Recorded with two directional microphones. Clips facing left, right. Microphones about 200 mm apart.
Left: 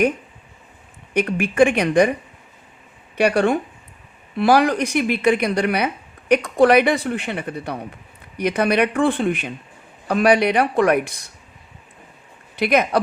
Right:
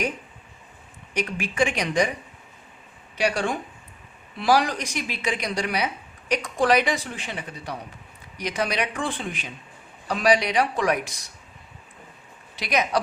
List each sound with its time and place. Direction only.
1.1 s speech: 55° left (ahead or behind)
3.2 s speech: 60° left (ahead or behind)
12.5 s speech: 55° left (ahead or behind)